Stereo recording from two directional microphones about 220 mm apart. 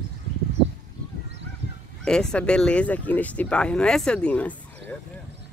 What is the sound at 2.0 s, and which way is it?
Speech, 5° left (ahead or behind).